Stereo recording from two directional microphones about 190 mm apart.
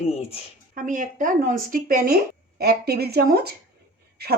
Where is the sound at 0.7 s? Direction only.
40° right (ahead or behind).